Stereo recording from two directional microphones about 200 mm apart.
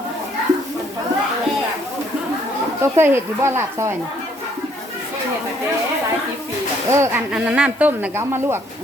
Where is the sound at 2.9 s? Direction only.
10° right (ahead or behind).